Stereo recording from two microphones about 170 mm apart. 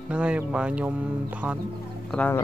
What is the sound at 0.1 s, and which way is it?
Speech, 5° right (ahead or behind).